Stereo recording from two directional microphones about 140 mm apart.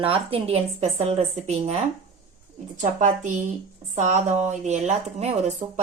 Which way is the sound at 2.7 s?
65° right (ahead or behind).